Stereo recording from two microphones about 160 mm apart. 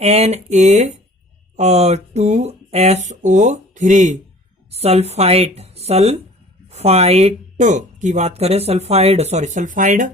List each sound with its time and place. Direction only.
0.0 s speech: 40° right (ahead or behind)
4.7 s speech: 40° right (ahead or behind)